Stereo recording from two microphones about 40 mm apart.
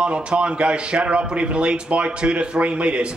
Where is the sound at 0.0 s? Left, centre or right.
Right.